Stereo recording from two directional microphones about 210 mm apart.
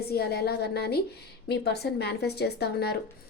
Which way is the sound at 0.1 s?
50° left (ahead or behind).